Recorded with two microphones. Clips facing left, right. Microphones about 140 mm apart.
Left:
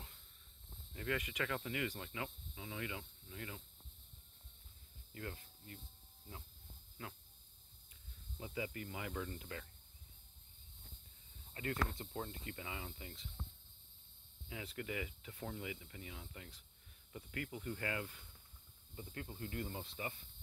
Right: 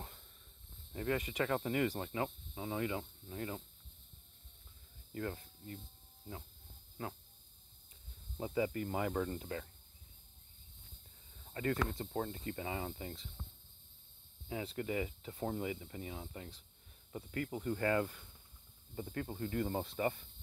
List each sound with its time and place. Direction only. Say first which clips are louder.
0.0 s a sound: right 8 dB; 50° right (ahead or behind)
0.9 s speech: right 5 dB; 35° right (ahead or behind)
5.1 s speech: right 7 dB; 40° right (ahead or behind)
7.0 s speech: right 7 dB; 40° right (ahead or behind)
8.4 s speech: right 9 dB; 40° right (ahead or behind)
11.5 s speech: right 5 dB; 40° right (ahead or behind)
14.5 s speech: right 6 dB; 35° right (ahead or behind)